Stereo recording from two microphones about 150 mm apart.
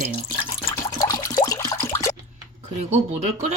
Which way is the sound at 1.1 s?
20° left (ahead or behind).